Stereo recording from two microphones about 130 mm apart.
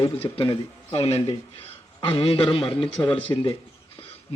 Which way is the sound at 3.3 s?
30° left (ahead or behind).